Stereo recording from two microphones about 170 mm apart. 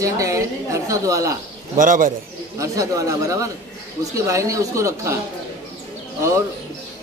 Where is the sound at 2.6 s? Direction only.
20° right (ahead or behind).